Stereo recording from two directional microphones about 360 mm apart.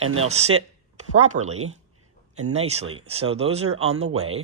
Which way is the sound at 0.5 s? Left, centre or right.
Right.